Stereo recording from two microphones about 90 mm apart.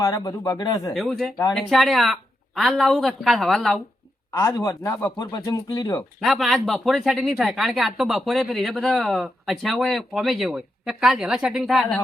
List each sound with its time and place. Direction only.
0.0 s speech: 45° left (ahead or behind)
1.5 s speech: centre (ahead or behind)
4.3 s speech: 30° left (ahead or behind)
6.1 s speech: centre (ahead or behind)
11.6 s speech: 5° left (ahead or behind)